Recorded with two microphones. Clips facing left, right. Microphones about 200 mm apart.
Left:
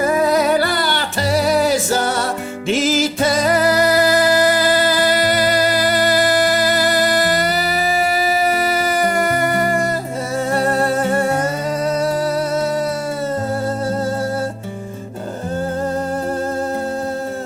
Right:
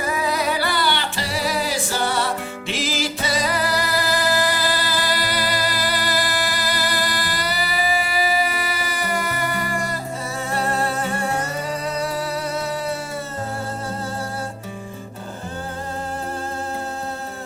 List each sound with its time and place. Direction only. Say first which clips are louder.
0.0 s music: left 8 dB; 50° left (ahead or behind)